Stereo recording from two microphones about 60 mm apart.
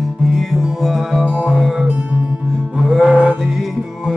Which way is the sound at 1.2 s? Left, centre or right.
Centre.